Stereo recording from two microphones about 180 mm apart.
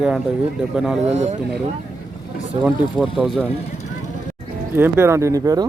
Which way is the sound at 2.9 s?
Centre (ahead or behind).